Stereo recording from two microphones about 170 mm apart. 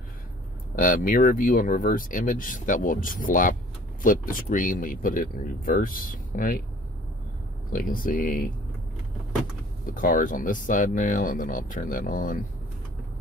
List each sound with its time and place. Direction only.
0.7 s speech: 50° left (ahead or behind)
7.7 s speech: 55° left (ahead or behind)
9.8 s speech: 55° left (ahead or behind)